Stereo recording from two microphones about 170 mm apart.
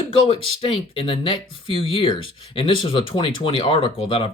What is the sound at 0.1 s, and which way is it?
Speech, 35° left (ahead or behind).